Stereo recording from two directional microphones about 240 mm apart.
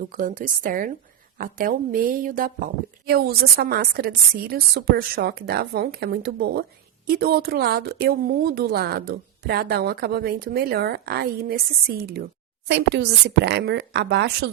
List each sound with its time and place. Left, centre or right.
0.1 s a woman's voice: right